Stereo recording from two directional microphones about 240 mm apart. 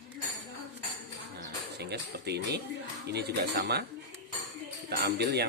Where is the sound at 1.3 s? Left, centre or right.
Right.